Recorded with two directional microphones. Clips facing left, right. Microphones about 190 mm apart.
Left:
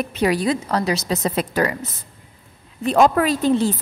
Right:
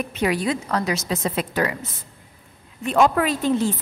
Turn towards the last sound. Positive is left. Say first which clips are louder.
# left 3 dB
turn(degrees=35)  # may be behind; listen again after turning